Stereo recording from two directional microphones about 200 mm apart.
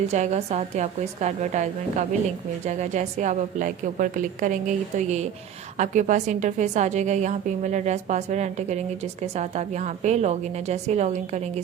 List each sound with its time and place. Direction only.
0.1 s a woman's voice: 35° right (ahead or behind)